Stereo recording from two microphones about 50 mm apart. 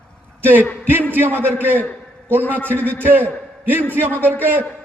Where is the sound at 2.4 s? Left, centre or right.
Left.